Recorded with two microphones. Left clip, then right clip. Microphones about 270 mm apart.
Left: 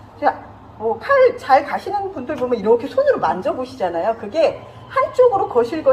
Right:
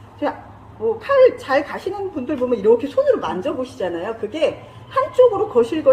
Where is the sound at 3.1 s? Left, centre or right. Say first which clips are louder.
Left 2 dB; right.